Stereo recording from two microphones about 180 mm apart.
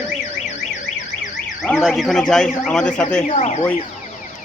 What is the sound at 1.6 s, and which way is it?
Speech, 5° left (ahead or behind).